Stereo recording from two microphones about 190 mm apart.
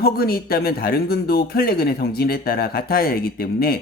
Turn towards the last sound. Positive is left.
turn(degrees=55)  # may be behind; listen again after turning